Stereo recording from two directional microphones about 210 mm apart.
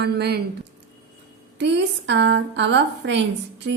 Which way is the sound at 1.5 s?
55° right (ahead or behind).